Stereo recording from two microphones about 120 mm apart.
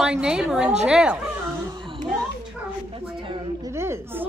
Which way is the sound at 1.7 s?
40° right (ahead or behind).